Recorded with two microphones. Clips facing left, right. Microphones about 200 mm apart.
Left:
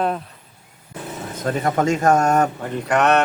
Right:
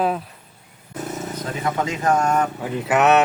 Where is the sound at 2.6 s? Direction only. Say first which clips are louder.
Right 1 dB; 5° right (ahead or behind).